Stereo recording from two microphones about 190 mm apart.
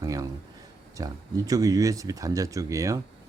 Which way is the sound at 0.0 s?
20° right (ahead or behind).